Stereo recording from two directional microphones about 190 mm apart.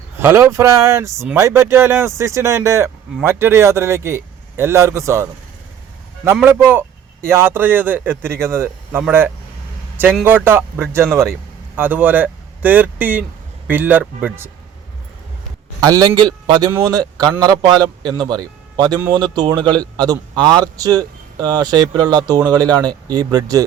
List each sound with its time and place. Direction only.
0.2 s speech: 10° right (ahead or behind)
15.8 s a man's voice: 20° right (ahead or behind)